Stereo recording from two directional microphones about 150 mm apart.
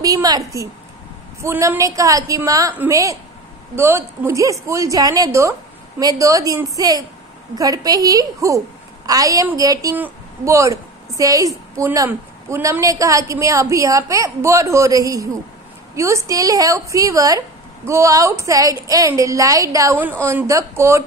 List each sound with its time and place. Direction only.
0.0 s a woman's voice: 25° right (ahead or behind)
1.4 s a woman's voice: 15° right (ahead or behind)
2.7 s a woman's voice: 10° right (ahead or behind)